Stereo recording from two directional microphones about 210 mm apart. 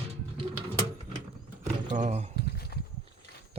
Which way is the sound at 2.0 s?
35° right (ahead or behind).